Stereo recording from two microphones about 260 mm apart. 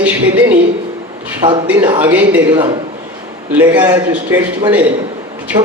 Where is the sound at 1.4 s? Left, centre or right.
Centre.